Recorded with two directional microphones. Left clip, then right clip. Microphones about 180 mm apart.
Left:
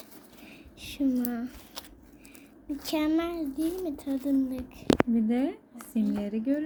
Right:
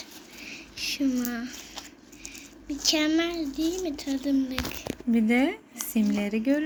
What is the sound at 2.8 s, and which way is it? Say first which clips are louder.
Speech: right 4 dB; 40° left (ahead or behind).